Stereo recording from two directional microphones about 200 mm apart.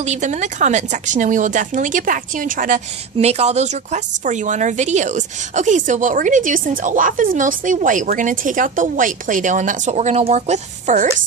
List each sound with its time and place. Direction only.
0.0 s a woman's voice: 35° right (ahead or behind)